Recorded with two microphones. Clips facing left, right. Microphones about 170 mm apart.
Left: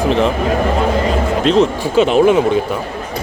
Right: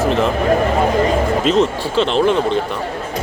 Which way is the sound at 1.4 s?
Centre (ahead or behind).